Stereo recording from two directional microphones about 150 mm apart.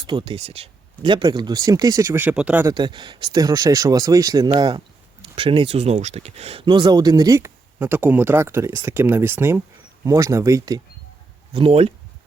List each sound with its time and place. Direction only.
0.0 s speech: 35° right (ahead or behind); by 2.6 s 10° right (ahead or behind)
2.6 s speech: 30° right (ahead or behind)
11.5 s speech: 40° right (ahead or behind)